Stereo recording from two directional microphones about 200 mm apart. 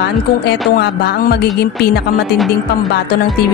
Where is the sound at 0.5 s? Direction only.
55° left (ahead or behind).